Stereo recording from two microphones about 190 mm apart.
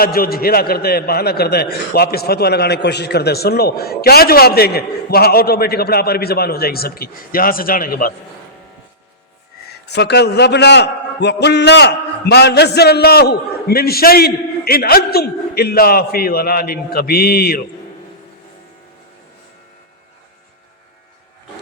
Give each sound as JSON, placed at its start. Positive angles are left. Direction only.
{"t": 0.0, "sound": "a man's voice", "side_deg": 50}
{"t": 9.9, "sound": "a man's voice", "side_deg": 60}